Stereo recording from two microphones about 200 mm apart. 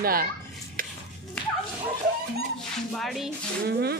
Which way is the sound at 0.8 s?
45° right (ahead or behind).